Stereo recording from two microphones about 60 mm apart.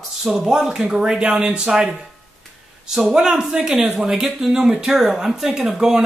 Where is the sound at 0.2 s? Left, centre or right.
Centre.